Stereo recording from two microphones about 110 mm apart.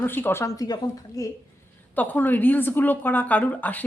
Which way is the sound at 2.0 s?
15° left (ahead or behind).